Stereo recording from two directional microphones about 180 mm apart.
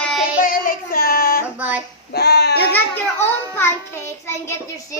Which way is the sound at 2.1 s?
65° left (ahead or behind).